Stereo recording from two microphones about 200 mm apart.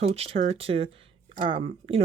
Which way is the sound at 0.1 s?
30° right (ahead or behind).